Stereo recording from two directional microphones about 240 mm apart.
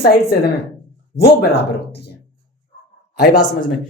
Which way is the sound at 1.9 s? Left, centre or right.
Left.